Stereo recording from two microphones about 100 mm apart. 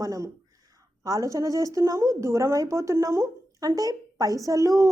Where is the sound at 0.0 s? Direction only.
30° right (ahead or behind).